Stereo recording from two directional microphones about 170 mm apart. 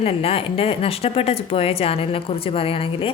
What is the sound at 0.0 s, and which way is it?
Speech, 35° left (ahead or behind).